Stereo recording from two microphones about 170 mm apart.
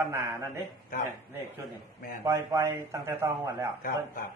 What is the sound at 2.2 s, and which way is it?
A man's voice, 15° right (ahead or behind).